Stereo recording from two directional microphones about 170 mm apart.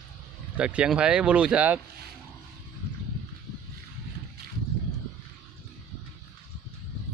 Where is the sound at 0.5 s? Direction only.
5° right (ahead or behind).